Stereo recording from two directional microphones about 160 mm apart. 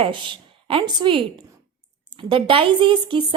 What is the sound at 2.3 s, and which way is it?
Speech, 35° right (ahead or behind).